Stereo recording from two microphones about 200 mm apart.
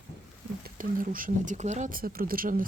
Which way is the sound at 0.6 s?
45° right (ahead or behind).